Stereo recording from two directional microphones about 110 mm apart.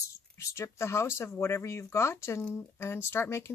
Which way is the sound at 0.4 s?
25° left (ahead or behind).